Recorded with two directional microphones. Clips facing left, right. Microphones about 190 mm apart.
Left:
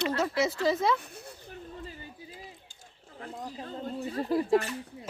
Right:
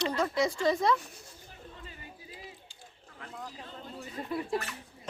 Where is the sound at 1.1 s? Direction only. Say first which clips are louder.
Left 7 dB; 60° left (ahead or behind).